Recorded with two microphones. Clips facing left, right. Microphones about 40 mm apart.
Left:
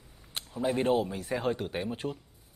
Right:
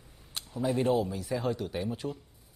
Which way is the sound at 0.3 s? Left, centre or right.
Left.